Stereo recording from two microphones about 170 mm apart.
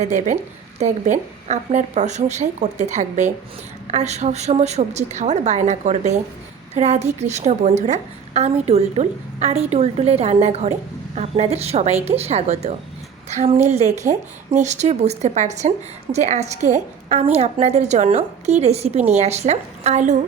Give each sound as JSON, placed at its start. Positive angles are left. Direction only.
{"t": 0.0, "sound": "a woman's voice", "side_deg": -45}